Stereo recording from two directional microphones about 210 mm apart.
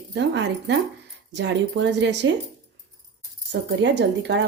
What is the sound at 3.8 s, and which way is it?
Speech, 55° right (ahead or behind).